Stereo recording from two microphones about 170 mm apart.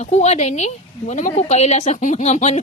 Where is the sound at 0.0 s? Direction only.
40° left (ahead or behind).